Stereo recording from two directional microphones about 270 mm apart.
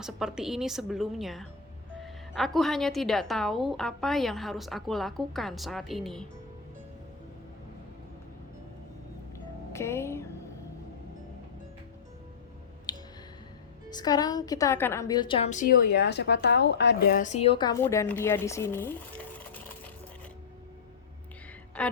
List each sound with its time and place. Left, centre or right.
0.0 s a woman's voice: centre
9.7 s a woman's voice: centre
12.9 s a sound: centre
13.9 s a woman's voice: centre
21.8 s a woman's voice: centre